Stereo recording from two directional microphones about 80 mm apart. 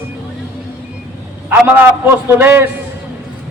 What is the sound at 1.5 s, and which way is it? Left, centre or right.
A man's voice, right.